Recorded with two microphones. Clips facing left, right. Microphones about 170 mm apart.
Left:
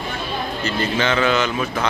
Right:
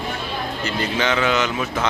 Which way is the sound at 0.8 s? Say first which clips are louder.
Left 1 dB; 15° right (ahead or behind).